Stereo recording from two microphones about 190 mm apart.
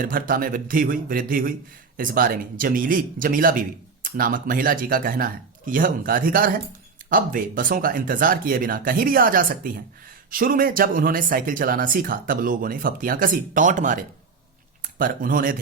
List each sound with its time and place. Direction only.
0.0 s speech: 45° right (ahead or behind)